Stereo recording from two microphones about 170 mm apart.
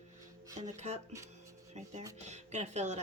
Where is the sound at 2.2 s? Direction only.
40° right (ahead or behind).